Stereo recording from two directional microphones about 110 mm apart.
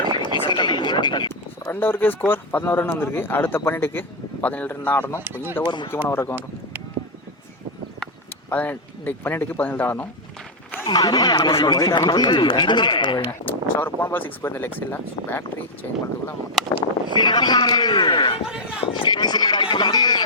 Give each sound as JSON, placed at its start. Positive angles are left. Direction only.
{"t": 0.2, "sound": "a sound", "side_deg": 45}
{"t": 1.6, "sound": "speech", "side_deg": 20}
{"t": 5.2, "sound": "speech", "side_deg": -20}
{"t": 5.6, "sound": "speech", "side_deg": 45}
{"t": 6.1, "sound": "speech", "side_deg": 25}
{"t": 8.4, "sound": "speech", "side_deg": 20}
{"t": 10.8, "sound": "speech", "side_deg": 40}
{"t": 13.4, "sound": "speech", "side_deg": 15}
{"t": 17.2, "sound": "speech", "side_deg": 40}
{"t": 18.4, "sound": "run", "side_deg": -5}
{"t": 18.9, "sound": "a sound", "side_deg": 45}